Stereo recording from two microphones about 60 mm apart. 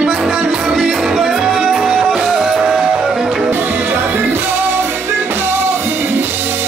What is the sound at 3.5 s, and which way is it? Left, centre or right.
Music, right.